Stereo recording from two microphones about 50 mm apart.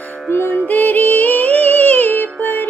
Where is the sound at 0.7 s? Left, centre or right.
Left.